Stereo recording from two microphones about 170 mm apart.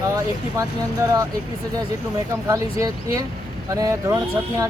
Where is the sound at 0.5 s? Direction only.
20° right (ahead or behind).